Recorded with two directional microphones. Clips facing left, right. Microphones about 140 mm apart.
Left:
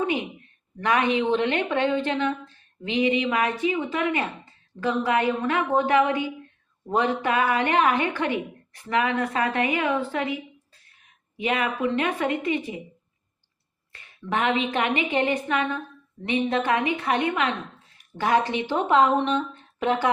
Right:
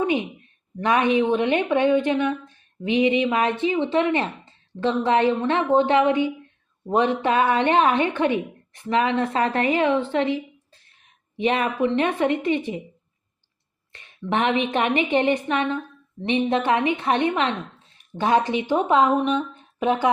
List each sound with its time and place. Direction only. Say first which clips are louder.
0.0 s a woman's voice: right 3 dB; 20° right (ahead or behind)
13.9 s a woman's voice: right 3 dB; 25° right (ahead or behind)